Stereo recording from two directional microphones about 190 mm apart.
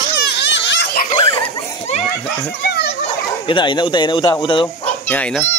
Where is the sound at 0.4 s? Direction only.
70° left (ahead or behind).